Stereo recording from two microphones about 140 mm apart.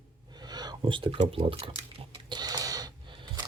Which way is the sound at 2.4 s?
30° right (ahead or behind).